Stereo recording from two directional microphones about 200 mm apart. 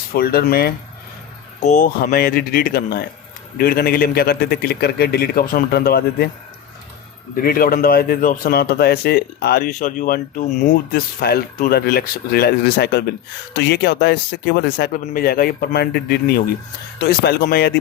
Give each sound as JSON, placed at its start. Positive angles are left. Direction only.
{"t": 0.1, "sound": "speech", "side_deg": 50}
{"t": 1.6, "sound": "speech", "side_deg": 40}
{"t": 7.4, "sound": "speech", "side_deg": 45}